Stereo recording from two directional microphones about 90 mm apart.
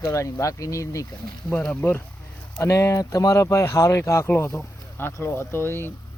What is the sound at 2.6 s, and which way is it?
Speech, 30° left (ahead or behind).